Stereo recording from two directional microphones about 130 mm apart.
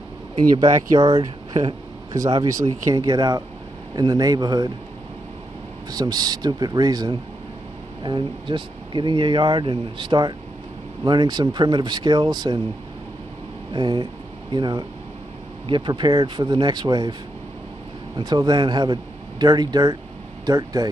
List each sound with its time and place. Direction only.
0.4 s speech: 35° right (ahead or behind)
5.9 s speech: 30° right (ahead or behind)
13.7 s speech: 35° right (ahead or behind)
18.1 s speech: 30° right (ahead or behind)